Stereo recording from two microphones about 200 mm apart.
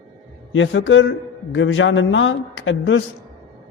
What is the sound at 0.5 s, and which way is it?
A man's voice, 70° left (ahead or behind).